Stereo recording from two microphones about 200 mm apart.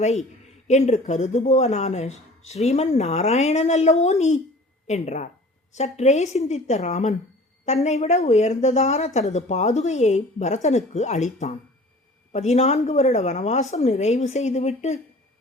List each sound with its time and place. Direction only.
0.0 s speech: 35° left (ahead or behind)